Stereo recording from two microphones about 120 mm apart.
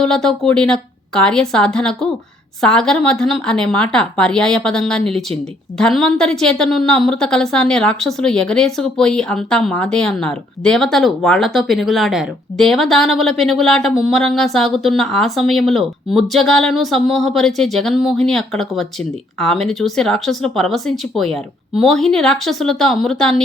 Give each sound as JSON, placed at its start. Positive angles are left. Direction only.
{"t": 0.0, "sound": "a woman's voice", "side_deg": 5}